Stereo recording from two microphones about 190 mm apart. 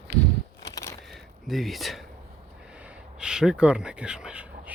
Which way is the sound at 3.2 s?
5° right (ahead or behind).